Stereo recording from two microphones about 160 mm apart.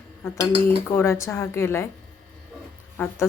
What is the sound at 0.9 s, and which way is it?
Speech, 15° left (ahead or behind).